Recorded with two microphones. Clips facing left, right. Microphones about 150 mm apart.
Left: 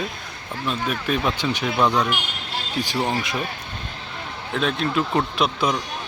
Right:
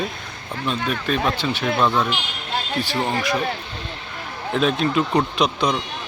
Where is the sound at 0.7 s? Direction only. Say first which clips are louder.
Right 1 dB; 10° left (ahead or behind).